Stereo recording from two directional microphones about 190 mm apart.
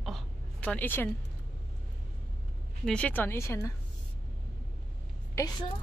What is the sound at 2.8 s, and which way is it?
Speech, 5° left (ahead or behind).